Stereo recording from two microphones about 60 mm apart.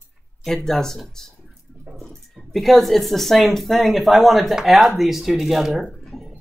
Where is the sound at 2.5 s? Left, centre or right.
Centre.